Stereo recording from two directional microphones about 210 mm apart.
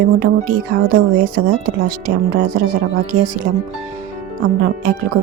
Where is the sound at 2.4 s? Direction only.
40° right (ahead or behind).